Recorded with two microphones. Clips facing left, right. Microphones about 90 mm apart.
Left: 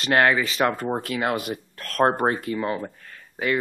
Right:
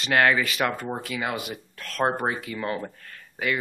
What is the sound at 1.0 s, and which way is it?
Speech, 50° left (ahead or behind).